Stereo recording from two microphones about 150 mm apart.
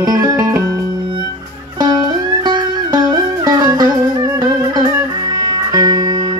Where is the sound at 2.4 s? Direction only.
30° right (ahead or behind).